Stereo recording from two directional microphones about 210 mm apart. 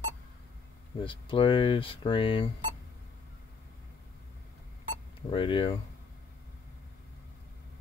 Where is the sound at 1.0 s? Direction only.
25° left (ahead or behind).